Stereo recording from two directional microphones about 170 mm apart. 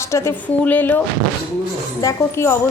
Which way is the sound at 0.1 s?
15° left (ahead or behind).